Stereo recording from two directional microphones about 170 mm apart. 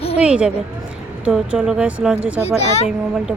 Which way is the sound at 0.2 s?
5° right (ahead or behind).